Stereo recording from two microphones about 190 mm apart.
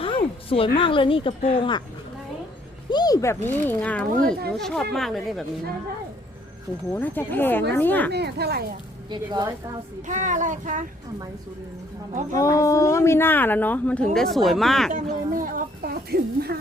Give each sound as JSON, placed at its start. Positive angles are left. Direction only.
{"t": 0.0, "sound": "a sound", "side_deg": 30}
{"t": 0.8, "sound": "speech", "side_deg": 25}
{"t": 2.9, "sound": "speech", "side_deg": 20}
{"t": 6.9, "sound": "speech", "side_deg": 10}
{"t": 8.1, "sound": "speech", "side_deg": -60}
{"t": 9.0, "sound": "a woman's voice", "side_deg": -20}
{"t": 10.1, "sound": "speech", "side_deg": -40}
{"t": 12.4, "sound": "speech", "side_deg": 15}
{"t": 14.9, "sound": "speech", "side_deg": -45}